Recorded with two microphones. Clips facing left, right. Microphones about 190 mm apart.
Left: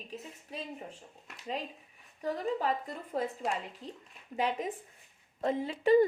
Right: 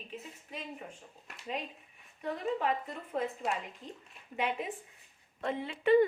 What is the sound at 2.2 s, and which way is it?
A woman's voice, 35° left (ahead or behind).